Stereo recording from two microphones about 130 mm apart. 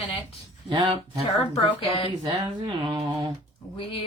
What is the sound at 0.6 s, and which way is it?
Speech, 35° right (ahead or behind).